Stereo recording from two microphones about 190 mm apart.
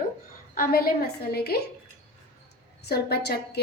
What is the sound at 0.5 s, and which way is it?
A woman's voice, 50° left (ahead or behind).